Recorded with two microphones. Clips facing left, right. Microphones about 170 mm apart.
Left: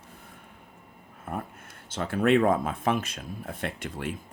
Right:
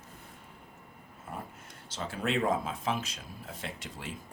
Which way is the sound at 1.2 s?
55° left (ahead or behind).